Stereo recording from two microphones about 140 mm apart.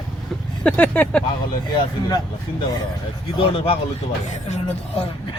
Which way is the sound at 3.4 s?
40° left (ahead or behind).